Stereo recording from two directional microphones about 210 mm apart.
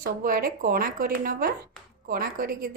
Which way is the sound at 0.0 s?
45° right (ahead or behind).